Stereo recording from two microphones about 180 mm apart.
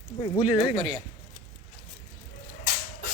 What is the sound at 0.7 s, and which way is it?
Speech, 30° right (ahead or behind).